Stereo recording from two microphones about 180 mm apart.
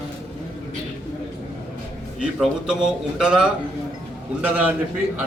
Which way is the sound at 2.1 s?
5° right (ahead or behind).